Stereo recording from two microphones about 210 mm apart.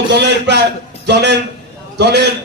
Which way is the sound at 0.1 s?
55° right (ahead or behind).